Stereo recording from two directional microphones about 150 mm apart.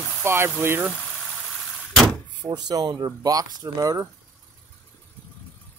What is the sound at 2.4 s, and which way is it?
Speech, 25° right (ahead or behind).